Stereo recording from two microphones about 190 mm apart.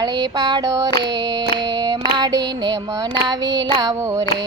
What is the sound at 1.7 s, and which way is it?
Female singing, 20° right (ahead or behind).